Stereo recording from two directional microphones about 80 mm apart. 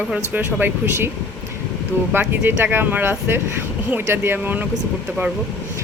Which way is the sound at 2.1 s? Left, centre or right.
Right.